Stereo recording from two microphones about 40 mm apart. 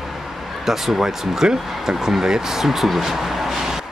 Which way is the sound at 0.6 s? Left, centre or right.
Centre.